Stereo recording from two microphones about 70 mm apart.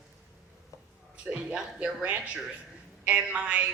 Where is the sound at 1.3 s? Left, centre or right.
Centre.